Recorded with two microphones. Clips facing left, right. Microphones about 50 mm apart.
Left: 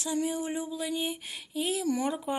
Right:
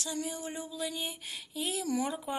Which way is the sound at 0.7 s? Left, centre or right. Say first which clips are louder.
Left 5 dB; centre.